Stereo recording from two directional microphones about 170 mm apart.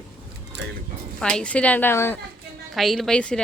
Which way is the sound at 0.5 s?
90° right.